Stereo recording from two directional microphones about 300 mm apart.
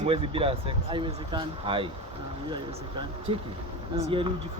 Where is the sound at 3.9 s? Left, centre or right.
Centre.